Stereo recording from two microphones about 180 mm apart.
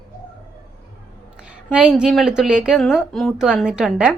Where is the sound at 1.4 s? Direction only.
5° right (ahead or behind).